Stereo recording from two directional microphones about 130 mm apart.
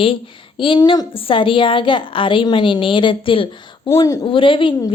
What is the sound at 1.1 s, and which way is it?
A woman's voice, 45° left (ahead or behind).